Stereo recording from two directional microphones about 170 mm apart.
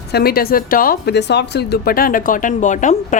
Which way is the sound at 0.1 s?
65° left (ahead or behind).